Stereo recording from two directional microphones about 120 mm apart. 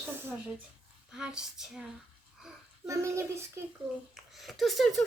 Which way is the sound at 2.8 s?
25° right (ahead or behind).